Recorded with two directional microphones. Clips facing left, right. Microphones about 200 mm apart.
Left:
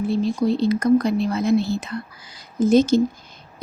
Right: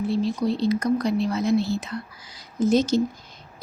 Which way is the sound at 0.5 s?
55° left (ahead or behind).